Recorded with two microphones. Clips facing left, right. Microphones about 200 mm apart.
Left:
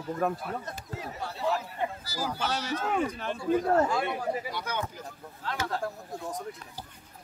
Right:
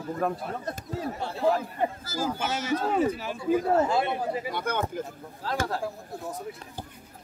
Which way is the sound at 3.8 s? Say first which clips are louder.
Right 3 dB; 25° right (ahead or behind).